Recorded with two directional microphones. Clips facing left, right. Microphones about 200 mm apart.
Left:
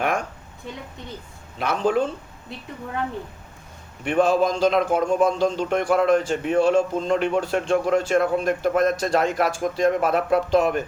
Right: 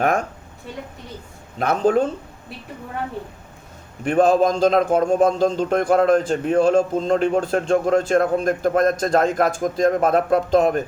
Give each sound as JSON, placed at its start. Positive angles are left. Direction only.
{"t": 1.5, "sound": "speech", "side_deg": -45}
{"t": 4.0, "sound": "a man's voice", "side_deg": -40}